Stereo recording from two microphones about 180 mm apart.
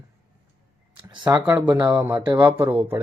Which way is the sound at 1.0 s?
20° right (ahead or behind).